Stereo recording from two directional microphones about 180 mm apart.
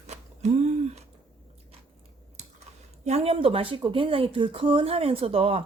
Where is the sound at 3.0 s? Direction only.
35° right (ahead or behind).